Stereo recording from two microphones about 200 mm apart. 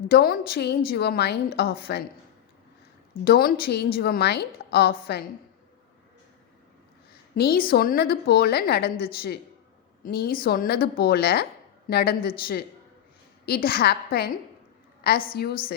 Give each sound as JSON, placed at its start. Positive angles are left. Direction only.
{"t": 0.1, "sound": "a woman's voice", "side_deg": 50}
{"t": 3.2, "sound": "a woman's voice", "side_deg": 50}
{"t": 7.3, "sound": "a woman's voice", "side_deg": 50}
{"t": 13.4, "sound": "a woman's voice", "side_deg": 50}